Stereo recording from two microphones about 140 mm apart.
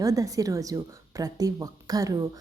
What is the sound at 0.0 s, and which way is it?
A woman's voice, 25° right (ahead or behind).